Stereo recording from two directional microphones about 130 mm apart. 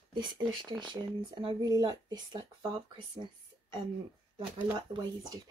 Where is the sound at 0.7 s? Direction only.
35° right (ahead or behind).